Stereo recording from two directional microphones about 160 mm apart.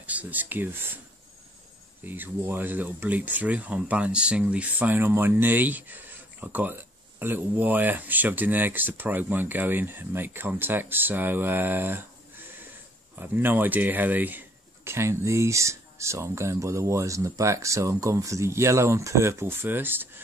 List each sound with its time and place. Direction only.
0.0 s speech: 10° right (ahead or behind)
2.0 s speech: 10° right (ahead or behind)